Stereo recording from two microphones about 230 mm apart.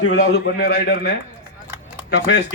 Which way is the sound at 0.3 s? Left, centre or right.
Left.